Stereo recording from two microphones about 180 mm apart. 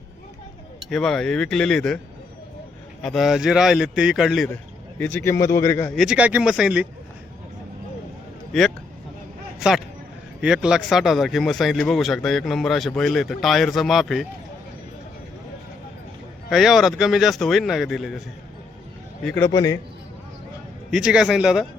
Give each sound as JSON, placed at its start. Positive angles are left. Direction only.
{"t": 0.9, "sound": "speech", "side_deg": 0}
{"t": 3.0, "sound": "speech", "side_deg": 0}
{"t": 4.9, "sound": "a man's voice", "side_deg": 10}
{"t": 5.9, "sound": "speech", "side_deg": 0}
{"t": 10.4, "sound": "speech", "side_deg": -5}
{"t": 16.5, "sound": "speech", "side_deg": 0}
{"t": 19.2, "sound": "a man's voice", "side_deg": 10}
{"t": 19.5, "sound": "a man's voice", "side_deg": 20}
{"t": 20.9, "sound": "speech", "side_deg": -5}